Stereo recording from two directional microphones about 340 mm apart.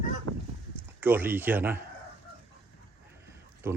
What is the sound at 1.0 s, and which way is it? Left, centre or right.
Speech, centre.